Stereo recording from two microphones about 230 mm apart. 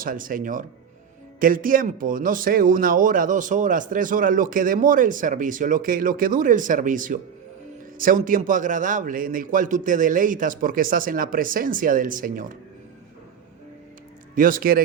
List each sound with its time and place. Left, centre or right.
0.0 s a man's voice: right
14.3 s a man's voice: right